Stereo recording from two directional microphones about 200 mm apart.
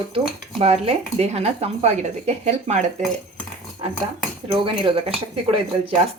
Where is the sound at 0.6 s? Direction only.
30° right (ahead or behind).